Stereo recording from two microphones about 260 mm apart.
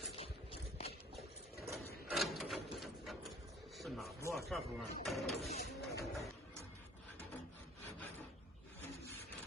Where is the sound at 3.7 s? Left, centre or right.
Centre.